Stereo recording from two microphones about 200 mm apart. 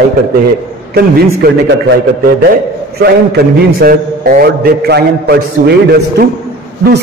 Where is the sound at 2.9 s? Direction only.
50° right (ahead or behind).